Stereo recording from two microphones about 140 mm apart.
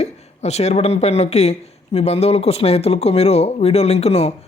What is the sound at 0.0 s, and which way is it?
Speech, 50° left (ahead or behind).